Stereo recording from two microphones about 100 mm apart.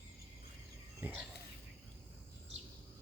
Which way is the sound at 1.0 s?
15° right (ahead or behind).